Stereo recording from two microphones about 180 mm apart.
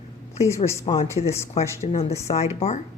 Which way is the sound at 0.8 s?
40° left (ahead or behind).